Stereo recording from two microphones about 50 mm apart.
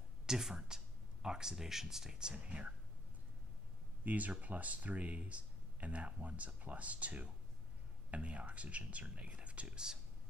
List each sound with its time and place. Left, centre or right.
0.3 s speech: centre
4.0 s speech: right